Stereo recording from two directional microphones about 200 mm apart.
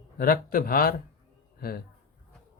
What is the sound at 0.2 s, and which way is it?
A man's voice, 45° left (ahead or behind).